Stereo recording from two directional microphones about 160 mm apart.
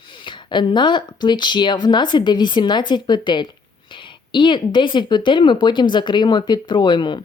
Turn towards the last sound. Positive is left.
turn(degrees=30)  # may be behind; listen again after turning